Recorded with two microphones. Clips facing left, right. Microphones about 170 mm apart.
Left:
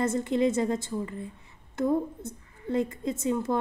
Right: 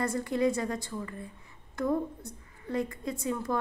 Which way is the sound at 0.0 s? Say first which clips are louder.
Left 3 dB; 20° left (ahead or behind).